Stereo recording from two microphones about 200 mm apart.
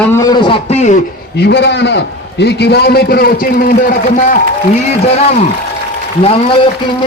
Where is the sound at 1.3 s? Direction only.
60° left (ahead or behind).